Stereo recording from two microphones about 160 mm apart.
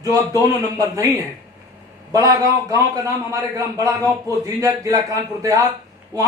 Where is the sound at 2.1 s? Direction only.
20° right (ahead or behind).